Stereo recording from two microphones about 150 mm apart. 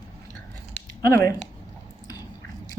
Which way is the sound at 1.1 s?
20° left (ahead or behind).